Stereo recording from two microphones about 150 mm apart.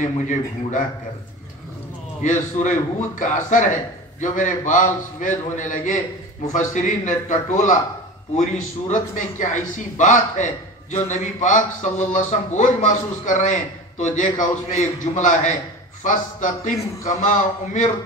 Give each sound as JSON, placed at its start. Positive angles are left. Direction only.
{"t": 0.0, "sound": "a man's voice", "side_deg": 55}
{"t": 2.2, "sound": "a man's voice", "side_deg": 55}